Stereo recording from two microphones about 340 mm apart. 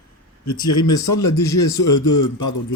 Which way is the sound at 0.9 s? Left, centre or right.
Centre.